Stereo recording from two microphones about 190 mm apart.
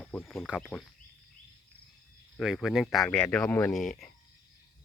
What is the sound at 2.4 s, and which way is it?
Speech, centre (ahead or behind).